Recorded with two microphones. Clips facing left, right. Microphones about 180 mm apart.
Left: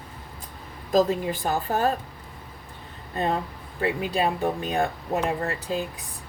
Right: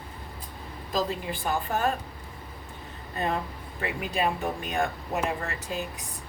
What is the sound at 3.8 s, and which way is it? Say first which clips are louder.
Speech: left 4 dB; 30° left (ahead or behind).